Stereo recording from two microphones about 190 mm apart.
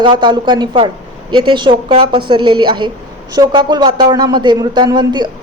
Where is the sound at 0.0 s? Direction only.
25° right (ahead or behind).